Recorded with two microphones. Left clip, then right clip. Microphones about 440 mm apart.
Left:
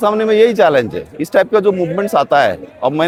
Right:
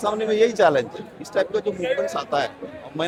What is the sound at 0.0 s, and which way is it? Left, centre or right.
Speech, left.